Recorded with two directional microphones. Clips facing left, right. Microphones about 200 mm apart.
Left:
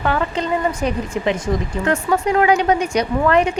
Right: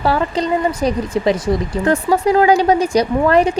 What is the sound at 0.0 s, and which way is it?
Speech, 35° right (ahead or behind).